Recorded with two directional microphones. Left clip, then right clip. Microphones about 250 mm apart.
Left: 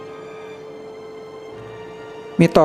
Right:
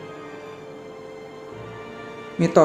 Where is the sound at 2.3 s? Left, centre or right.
Left.